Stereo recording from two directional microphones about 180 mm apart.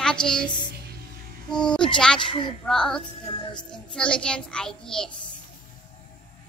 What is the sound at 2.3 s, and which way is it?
Speech, 25° left (ahead or behind).